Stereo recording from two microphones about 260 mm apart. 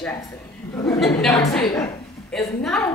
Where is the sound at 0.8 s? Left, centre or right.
Centre.